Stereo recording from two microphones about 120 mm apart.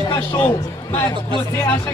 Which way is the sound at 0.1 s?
20° left (ahead or behind).